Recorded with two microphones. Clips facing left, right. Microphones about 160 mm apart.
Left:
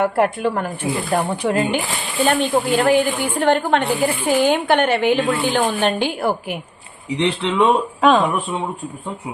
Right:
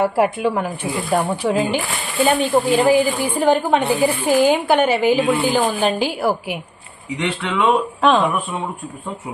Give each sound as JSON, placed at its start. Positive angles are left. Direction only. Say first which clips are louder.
{"t": 0.0, "sound": "a woman's voice", "louder": "right 1 dB", "side_deg": -5}
{"t": 7.2, "sound": "speech", "louder": "left 4 dB", "side_deg": 20}
{"t": 8.0, "sound": "a woman's voice", "louder": "left 1 dB", "side_deg": 0}